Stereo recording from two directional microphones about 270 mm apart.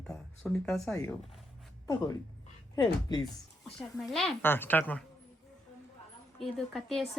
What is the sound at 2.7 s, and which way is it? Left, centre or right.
Speech, centre.